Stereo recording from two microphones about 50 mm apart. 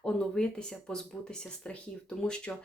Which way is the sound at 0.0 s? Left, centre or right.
Centre.